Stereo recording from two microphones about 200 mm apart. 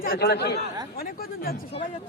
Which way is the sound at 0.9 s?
45° left (ahead or behind).